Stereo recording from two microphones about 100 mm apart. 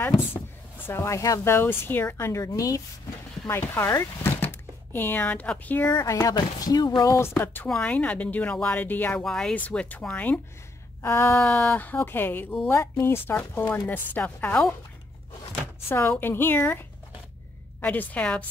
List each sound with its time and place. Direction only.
0.8 s chopping: 30° left (ahead or behind)
2.4 s speech: 35° left (ahead or behind)
3.4 s speech: 25° left (ahead or behind)
5.9 s speech: 35° left (ahead or behind)
7.0 s chopping: 30° left (ahead or behind)
7.6 s speech: 10° left (ahead or behind)
9.2 s speech: 5° left (ahead or behind)
11.0 s chopping: 25° left (ahead or behind)
11.4 s speech: 10° left (ahead or behind)
13.0 s chopping: 25° left (ahead or behind)
15.9 s chopping: 20° left (ahead or behind)
17.7 s speech: 15° left (ahead or behind)